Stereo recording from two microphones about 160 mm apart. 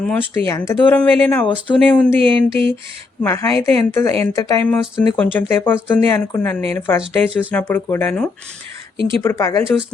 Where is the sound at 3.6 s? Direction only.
15° left (ahead or behind).